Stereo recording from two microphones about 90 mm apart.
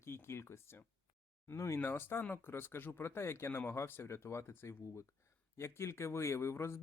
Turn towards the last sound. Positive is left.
turn(degrees=30)  # may be behind; listen again after turning